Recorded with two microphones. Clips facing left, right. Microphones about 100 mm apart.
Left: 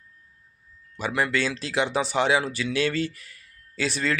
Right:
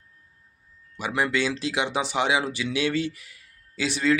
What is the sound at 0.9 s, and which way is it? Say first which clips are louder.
Speech: even; 15° right (ahead or behind).